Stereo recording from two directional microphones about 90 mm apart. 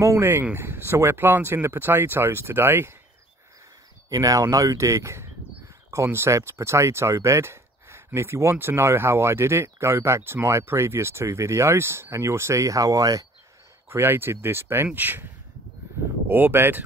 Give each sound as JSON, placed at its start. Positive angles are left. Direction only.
{"t": 0.0, "sound": "speech", "side_deg": -30}
{"t": 4.1, "sound": "speech", "side_deg": -40}
{"t": 13.8, "sound": "speech", "side_deg": -25}
{"t": 16.3, "sound": "speech", "side_deg": -25}